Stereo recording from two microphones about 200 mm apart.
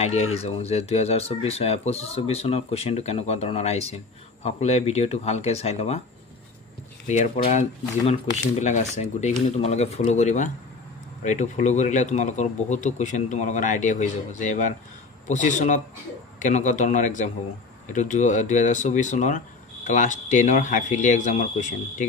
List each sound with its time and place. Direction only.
0.0 s speech: 30° left (ahead or behind)
7.1 s speech: 35° left (ahead or behind)